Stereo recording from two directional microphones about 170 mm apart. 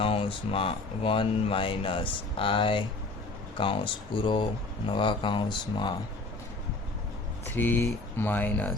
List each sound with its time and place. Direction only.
0.0 s speech: 30° left (ahead or behind)
7.5 s speech: 10° left (ahead or behind)